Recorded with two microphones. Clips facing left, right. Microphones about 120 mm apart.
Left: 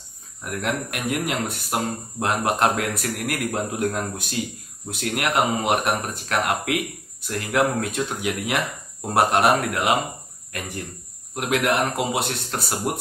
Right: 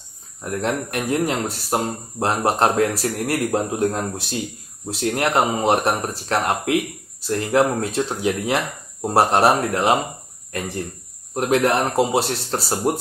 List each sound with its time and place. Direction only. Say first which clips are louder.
0.4 s speech: right 3 dB; 30° right (ahead or behind)
11.3 s speech: right 4 dB; 35° right (ahead or behind)